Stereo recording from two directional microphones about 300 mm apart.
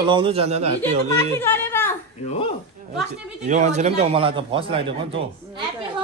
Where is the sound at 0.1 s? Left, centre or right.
Centre.